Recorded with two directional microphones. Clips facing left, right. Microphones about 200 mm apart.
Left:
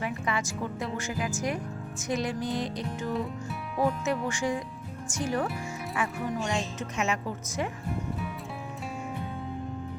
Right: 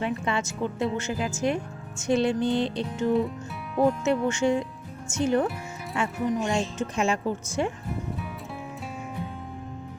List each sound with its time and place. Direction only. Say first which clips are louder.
0.0 s speech: right 4 dB; 25° right (ahead or behind)
3.1 s music: right 8 dB; centre (ahead or behind)
4.0 s speech: right 6 dB; 25° right (ahead or behind)